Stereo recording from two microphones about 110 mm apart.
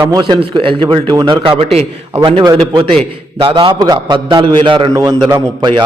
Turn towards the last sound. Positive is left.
turn(degrees=-45)  # may be behind; listen again after turning